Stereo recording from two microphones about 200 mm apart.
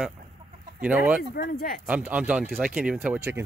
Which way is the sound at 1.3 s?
50° left (ahead or behind).